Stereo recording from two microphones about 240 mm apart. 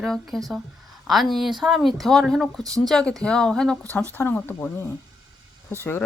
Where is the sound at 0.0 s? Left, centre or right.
Centre.